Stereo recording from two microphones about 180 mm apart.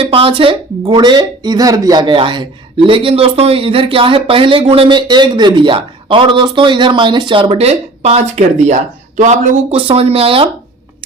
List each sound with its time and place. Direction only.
0.0 s speech: 30° right (ahead or behind)